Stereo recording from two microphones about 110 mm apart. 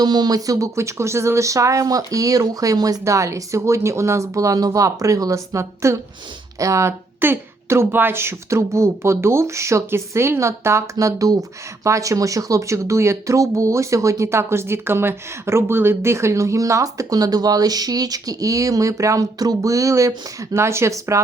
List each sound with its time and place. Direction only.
0.0 s speech: 40° right (ahead or behind)